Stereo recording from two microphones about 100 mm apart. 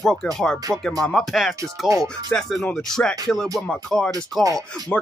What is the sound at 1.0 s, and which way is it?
Speech, 5° left (ahead or behind).